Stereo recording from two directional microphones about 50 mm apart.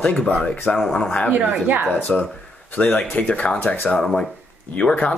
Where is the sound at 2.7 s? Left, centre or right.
Left.